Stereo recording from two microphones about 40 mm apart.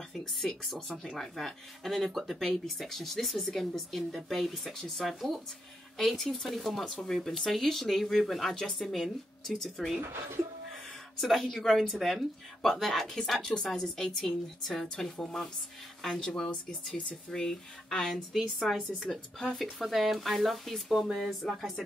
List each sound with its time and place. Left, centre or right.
0.3 s speech: centre
8.8 s speech: centre
11.1 s speech: centre
16.2 s speech: left; by 21.7 s centre